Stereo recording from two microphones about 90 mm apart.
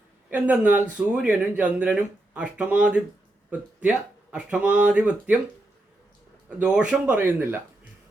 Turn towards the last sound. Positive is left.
turn(degrees=-20)  # may be behind; listen again after turning